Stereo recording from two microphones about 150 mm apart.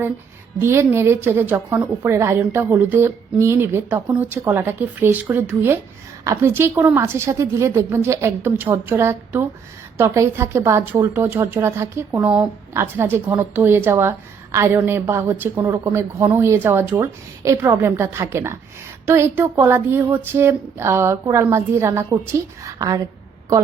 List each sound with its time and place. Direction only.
0.6 s a woman's voice: 15° right (ahead or behind)